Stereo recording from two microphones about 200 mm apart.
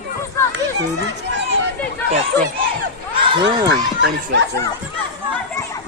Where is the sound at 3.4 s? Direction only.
65° right (ahead or behind).